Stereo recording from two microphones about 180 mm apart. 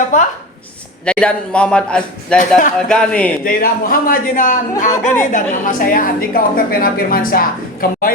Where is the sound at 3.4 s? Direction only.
50° left (ahead or behind).